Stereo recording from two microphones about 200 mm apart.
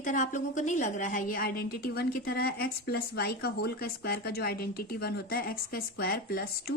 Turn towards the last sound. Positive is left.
turn(degrees=50)  # may be behind; listen again after turning